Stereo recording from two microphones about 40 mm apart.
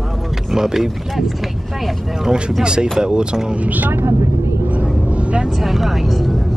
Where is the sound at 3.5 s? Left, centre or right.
Right.